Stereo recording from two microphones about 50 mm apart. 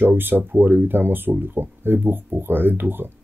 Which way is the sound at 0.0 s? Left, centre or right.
Right.